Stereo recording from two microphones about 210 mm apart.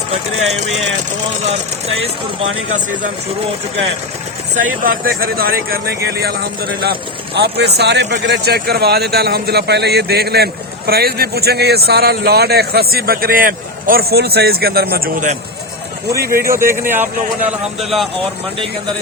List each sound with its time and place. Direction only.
4.5 s a man's voice: 40° right (ahead or behind)
16.5 s speech: 10° right (ahead or behind)
17.7 s speech: centre (ahead or behind)